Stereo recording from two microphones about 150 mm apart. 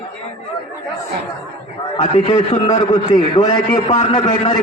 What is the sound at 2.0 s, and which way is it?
A man's voice, 35° left (ahead or behind).